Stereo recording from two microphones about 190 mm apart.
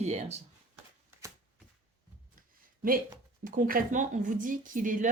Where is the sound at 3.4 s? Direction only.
45° right (ahead or behind).